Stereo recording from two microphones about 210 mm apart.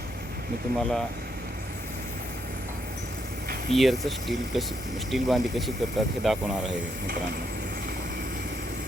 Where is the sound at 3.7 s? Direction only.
Centre (ahead or behind).